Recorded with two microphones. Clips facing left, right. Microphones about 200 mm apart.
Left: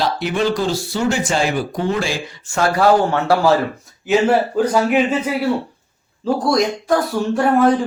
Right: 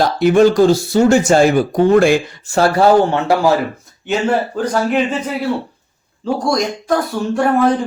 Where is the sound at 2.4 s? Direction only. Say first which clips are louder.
Right 2 dB; 35° right (ahead or behind).